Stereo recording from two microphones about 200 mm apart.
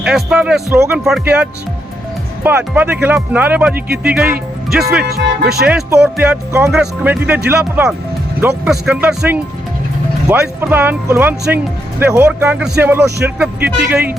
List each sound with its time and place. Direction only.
0.0 s speech: 5° right (ahead or behind)
5.0 s speech: 50° right (ahead or behind)
5.6 s speech: 5° right (ahead or behind)